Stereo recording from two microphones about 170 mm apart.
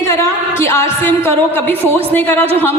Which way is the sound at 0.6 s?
15° left (ahead or behind).